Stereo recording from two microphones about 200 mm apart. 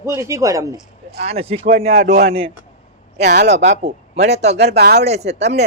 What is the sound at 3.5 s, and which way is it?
Speech, 35° right (ahead or behind).